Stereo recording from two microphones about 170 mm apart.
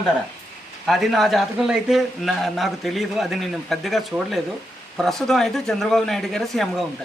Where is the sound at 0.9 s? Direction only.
Centre (ahead or behind).